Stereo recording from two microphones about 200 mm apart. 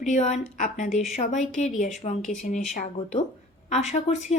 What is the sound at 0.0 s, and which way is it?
Speech, 35° left (ahead or behind).